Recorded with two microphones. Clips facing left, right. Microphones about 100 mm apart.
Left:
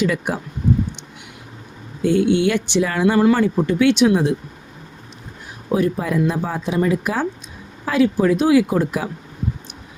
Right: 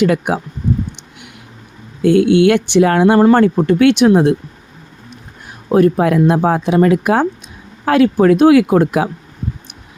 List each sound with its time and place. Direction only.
0.0 s speech: 60° right (ahead or behind)
2.0 s speech: 65° right (ahead or behind)
5.7 s speech: 65° right (ahead or behind)